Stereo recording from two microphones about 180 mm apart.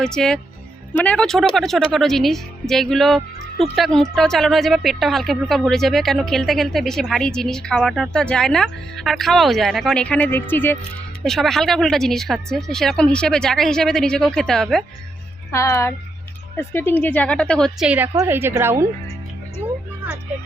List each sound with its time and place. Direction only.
0.0 s speech: 5° left (ahead or behind)
15.5 s a woman's voice: 15° left (ahead or behind)
17.8 s a woman's voice: 10° right (ahead or behind)